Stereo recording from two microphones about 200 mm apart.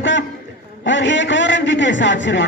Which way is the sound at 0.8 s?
65° left (ahead or behind).